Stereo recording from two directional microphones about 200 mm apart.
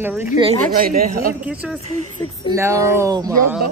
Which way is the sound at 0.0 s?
10° right (ahead or behind).